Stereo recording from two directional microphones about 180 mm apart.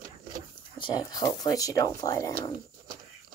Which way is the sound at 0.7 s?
25° left (ahead or behind).